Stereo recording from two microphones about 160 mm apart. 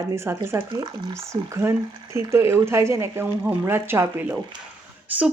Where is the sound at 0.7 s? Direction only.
25° right (ahead or behind).